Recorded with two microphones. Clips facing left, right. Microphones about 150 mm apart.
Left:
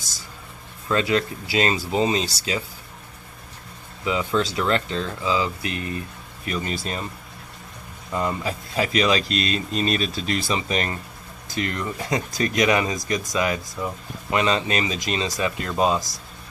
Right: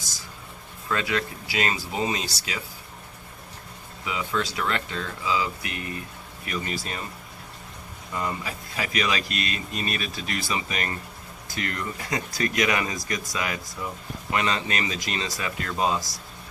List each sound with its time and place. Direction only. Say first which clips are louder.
0.9 s speech: left 5 dB; 30° left (ahead or behind)
4.0 s speech: left 6 dB; 30° left (ahead or behind)
8.1 s speech: left 5 dB; 30° left (ahead or behind)